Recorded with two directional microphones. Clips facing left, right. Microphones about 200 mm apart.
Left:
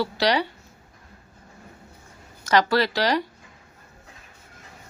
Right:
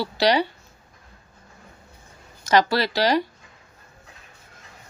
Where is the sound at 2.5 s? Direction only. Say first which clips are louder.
Even; 15° right (ahead or behind).